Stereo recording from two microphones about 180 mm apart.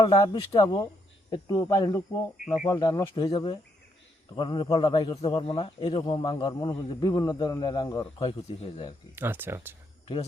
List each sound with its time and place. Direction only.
0.0 s speech: 25° left (ahead or behind)
9.1 s speech: 10° right (ahead or behind)